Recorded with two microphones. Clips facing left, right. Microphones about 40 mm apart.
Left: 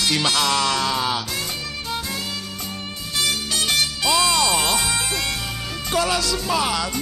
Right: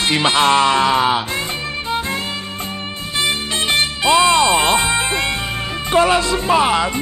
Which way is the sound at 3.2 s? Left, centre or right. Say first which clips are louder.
Right 4 dB; right.